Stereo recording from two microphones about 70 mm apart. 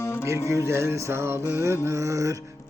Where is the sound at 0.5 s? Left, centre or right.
Right.